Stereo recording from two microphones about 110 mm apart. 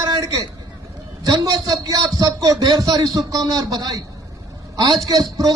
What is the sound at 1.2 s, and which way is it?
A man's voice, 35° right (ahead or behind).